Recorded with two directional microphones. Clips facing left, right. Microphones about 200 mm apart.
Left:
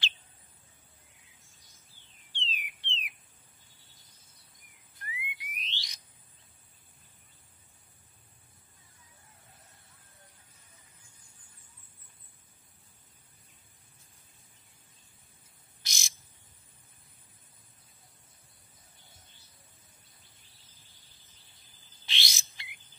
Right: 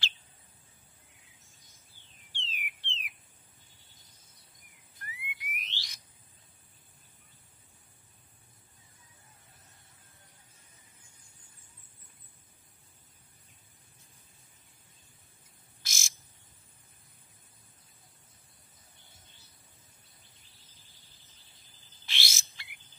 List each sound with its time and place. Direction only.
2.3 s bird: 20° left (ahead or behind)
5.0 s frog: 15° left (ahead or behind)
15.8 s frog: 20° left (ahead or behind)
22.0 s a sound: 20° left (ahead or behind)